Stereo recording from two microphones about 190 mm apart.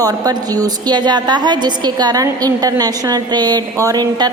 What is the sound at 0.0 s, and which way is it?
A woman's voice, 20° right (ahead or behind).